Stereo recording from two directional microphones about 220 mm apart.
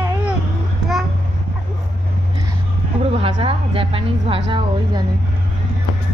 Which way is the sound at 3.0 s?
25° right (ahead or behind).